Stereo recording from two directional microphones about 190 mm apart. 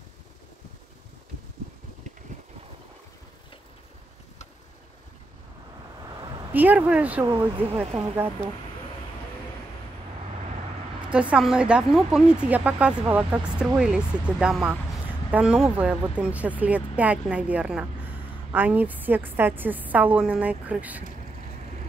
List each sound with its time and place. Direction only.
6.0 s a sound: 25° right (ahead or behind)
6.5 s speech: 10° right (ahead or behind)
11.1 s a woman's voice: 5° right (ahead or behind)